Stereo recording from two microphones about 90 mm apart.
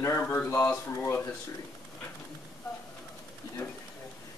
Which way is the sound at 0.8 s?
25° left (ahead or behind).